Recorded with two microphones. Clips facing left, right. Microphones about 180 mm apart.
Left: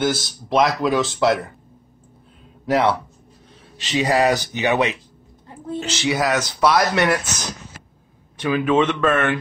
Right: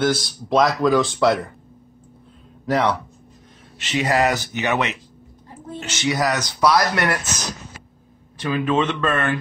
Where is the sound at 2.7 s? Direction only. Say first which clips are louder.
Left 2 dB; 10° left (ahead or behind).